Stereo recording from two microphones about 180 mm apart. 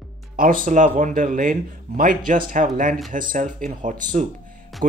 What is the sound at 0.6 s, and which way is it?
Speech, 50° right (ahead or behind).